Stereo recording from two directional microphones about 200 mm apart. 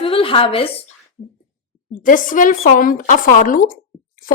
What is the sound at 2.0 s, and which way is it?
Speech, 40° left (ahead or behind).